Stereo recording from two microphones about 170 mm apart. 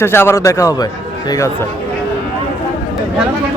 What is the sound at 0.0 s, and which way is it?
Speech, 15° left (ahead or behind).